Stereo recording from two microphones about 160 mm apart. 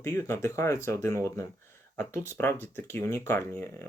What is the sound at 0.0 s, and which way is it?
Speech, 20° left (ahead or behind).